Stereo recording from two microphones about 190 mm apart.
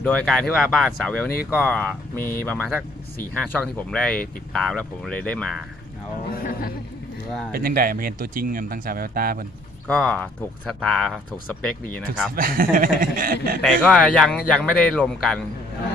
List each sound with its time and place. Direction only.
0.0 s speech: 5° left (ahead or behind)
6.3 s speech: 50° left (ahead or behind)
7.5 s speech: 50° right (ahead or behind)
9.8 s speech: 10° left (ahead or behind)
12.4 s speech: 45° right (ahead or behind)
13.6 s speech: 5° left (ahead or behind)